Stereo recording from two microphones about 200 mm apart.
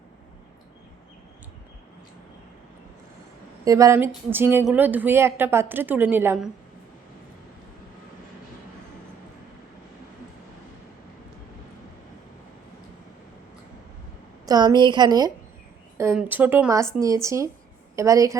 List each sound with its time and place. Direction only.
3.6 s a woman's voice: 15° right (ahead or behind)
14.4 s a woman's voice: 20° right (ahead or behind)
16.1 s a woman's voice: 10° right (ahead or behind)